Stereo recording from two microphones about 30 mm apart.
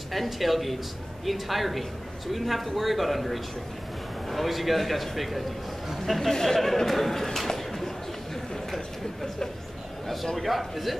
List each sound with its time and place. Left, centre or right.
0.1 s a man's voice: centre
6.9 s a sound: centre
10.3 s a man's voice: centre